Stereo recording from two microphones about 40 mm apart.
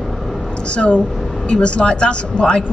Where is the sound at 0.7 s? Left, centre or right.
Left.